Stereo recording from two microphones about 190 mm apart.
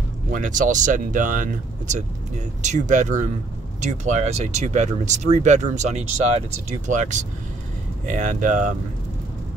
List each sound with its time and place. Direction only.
0.3 s speech: 40° right (ahead or behind)